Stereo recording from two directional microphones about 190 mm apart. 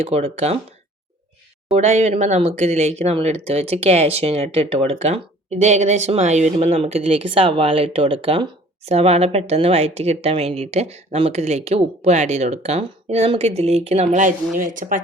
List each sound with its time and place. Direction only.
0.0 s speech: 35° right (ahead or behind)
1.7 s speech: 35° right (ahead or behind)